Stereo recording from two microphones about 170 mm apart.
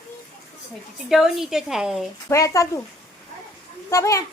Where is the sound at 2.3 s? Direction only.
20° left (ahead or behind).